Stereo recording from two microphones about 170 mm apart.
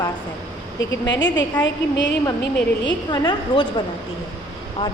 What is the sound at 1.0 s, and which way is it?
Speech, 90° left.